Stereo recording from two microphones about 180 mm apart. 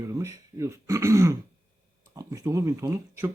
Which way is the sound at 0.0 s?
15° right (ahead or behind).